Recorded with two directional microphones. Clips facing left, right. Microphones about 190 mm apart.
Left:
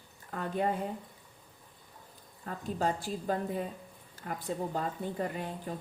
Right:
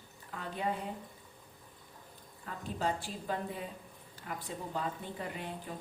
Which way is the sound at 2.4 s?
40° left (ahead or behind).